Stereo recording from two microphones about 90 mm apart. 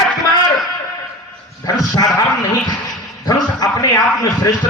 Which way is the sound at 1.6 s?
45° left (ahead or behind).